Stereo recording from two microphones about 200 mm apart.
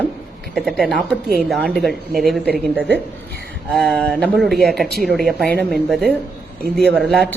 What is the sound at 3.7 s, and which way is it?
A woman's voice, 5° left (ahead or behind).